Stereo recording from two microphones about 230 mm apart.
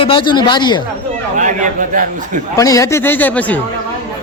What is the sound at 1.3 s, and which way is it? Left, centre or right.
A man's voice, right.